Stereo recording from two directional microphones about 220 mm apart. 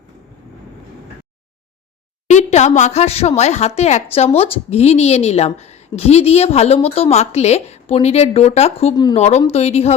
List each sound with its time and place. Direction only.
2.2 s a woman's voice: 30° left (ahead or behind)